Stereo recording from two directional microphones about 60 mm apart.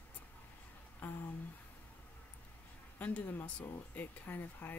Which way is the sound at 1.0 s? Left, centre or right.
Left.